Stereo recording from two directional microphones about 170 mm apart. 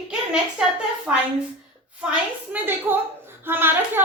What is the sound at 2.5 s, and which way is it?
A child's voice, 10° right (ahead or behind).